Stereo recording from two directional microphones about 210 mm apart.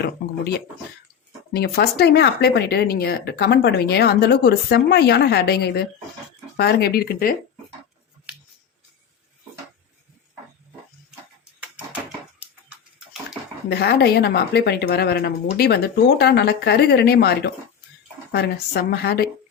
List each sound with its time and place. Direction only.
1.5 s speech: 50° left (ahead or behind)
13.7 s speech: 50° left (ahead or behind)